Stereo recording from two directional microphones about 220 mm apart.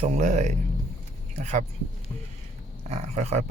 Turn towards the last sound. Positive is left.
turn(degrees=-30)  # may be behind; listen again after turning